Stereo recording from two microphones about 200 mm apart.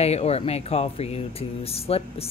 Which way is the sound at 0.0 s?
30° left (ahead or behind).